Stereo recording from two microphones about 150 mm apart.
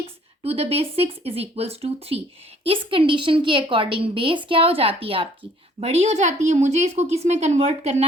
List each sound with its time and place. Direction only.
0.4 s a woman's voice: 40° right (ahead or behind)